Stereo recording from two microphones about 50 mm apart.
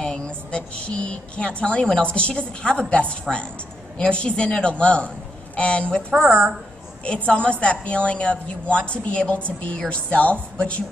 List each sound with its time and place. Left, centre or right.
0.0 s a woman's voice: centre
6.1 s a woman's voice: right
7.1 s a woman's voice: left